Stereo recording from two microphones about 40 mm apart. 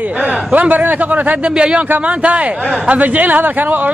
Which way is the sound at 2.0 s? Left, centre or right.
Right.